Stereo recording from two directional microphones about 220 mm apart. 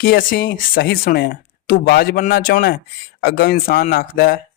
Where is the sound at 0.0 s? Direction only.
40° left (ahead or behind).